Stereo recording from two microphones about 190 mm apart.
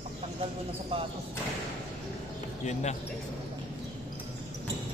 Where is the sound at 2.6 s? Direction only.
40° left (ahead or behind).